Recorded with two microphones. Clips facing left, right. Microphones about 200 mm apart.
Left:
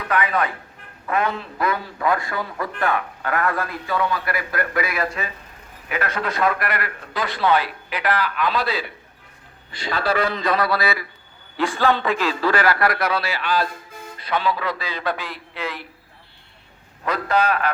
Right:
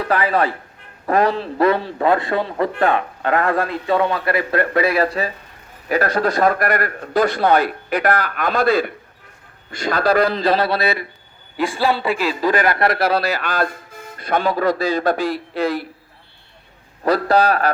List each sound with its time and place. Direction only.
0.0 s a man's voice: 35° right (ahead or behind)
11.5 s a man's voice: 15° right (ahead or behind); by 15.9 s 40° right (ahead or behind)
17.0 s a man's voice: 35° right (ahead or behind)